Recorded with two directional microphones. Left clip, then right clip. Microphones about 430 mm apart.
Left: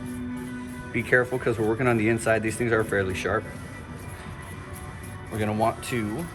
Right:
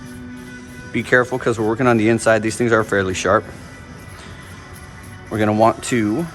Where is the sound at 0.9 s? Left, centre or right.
Centre.